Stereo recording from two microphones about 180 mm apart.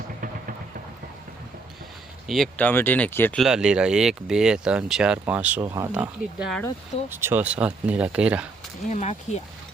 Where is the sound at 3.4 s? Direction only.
5° right (ahead or behind).